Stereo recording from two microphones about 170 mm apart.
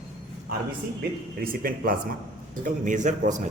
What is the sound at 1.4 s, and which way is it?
A man's voice, 60° right (ahead or behind).